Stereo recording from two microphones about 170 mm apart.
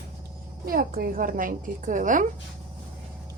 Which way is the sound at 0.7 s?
60° right (ahead or behind).